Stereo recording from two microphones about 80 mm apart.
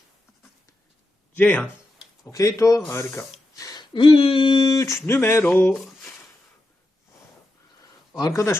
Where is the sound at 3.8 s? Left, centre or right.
Left.